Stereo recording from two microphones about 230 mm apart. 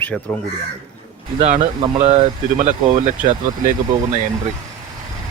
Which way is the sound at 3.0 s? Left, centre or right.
Right.